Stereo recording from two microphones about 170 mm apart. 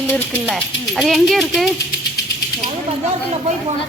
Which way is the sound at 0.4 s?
Centre (ahead or behind).